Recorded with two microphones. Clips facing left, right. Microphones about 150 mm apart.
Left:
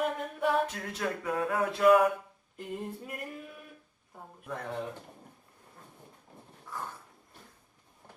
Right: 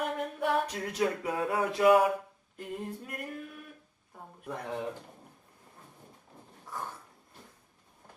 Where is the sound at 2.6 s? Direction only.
Centre (ahead or behind).